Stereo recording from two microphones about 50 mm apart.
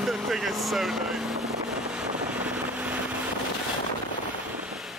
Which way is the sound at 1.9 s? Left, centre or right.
Right.